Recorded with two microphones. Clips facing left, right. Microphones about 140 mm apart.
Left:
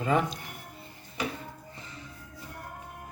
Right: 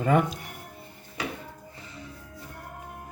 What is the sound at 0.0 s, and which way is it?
Speech, 50° right (ahead or behind).